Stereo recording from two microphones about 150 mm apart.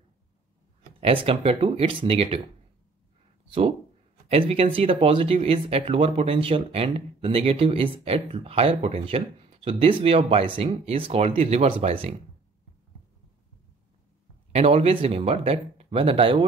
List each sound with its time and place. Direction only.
1.0 s speech: 35° right (ahead or behind)
4.3 s speech: 40° right (ahead or behind)
14.5 s speech: 40° right (ahead or behind)